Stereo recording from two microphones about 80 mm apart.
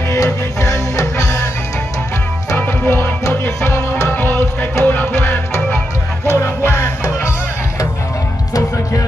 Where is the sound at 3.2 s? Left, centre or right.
Left.